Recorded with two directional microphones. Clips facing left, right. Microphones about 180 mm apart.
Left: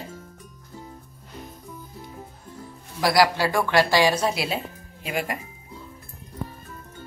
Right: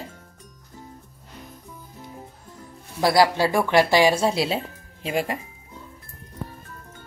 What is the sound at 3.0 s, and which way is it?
Speech, 25° right (ahead or behind).